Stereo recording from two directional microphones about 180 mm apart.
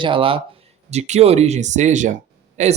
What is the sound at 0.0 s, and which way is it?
Speech, 30° right (ahead or behind).